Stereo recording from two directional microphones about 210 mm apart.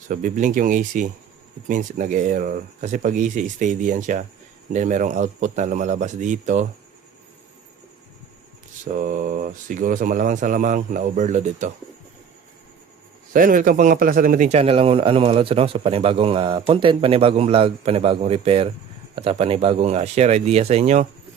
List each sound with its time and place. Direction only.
0.1 s speech: 40° right (ahead or behind)
8.8 s speech: 40° right (ahead or behind)
13.3 s a man's voice: 40° right (ahead or behind)